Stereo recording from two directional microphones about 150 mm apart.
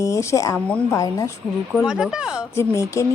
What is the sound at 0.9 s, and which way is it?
Speech, 20° left (ahead or behind).